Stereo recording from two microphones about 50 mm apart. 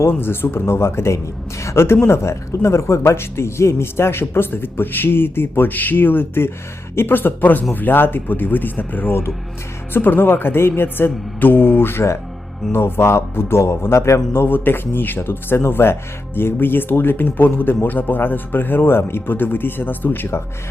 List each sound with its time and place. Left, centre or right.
0.1 s a man's voice: left
3.0 s speech: left
13.6 s a man's voice: left
14.4 s speech: left